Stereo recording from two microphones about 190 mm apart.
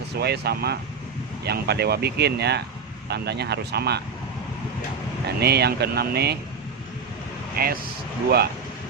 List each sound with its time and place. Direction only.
0.2 s speech: 60° right (ahead or behind)
5.2 s speech: 60° right (ahead or behind)
7.5 s speech: 50° right (ahead or behind)